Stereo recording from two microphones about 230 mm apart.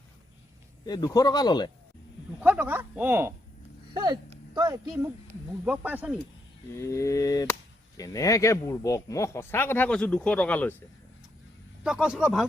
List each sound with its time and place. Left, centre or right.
0.9 s speech: centre
2.4 s speech: centre
6.7 s speech: centre
11.8 s speech: centre